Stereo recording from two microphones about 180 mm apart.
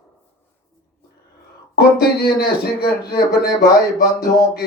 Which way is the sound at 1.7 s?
60° left (ahead or behind).